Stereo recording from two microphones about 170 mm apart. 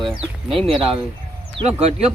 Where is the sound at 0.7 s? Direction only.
35° right (ahead or behind).